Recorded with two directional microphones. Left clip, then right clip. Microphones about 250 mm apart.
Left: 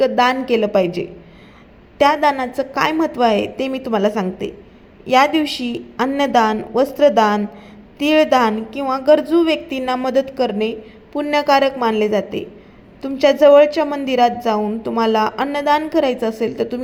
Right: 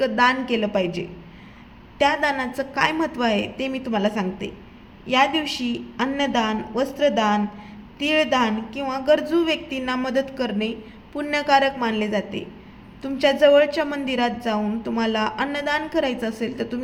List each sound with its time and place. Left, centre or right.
0.0 s a woman's voice: centre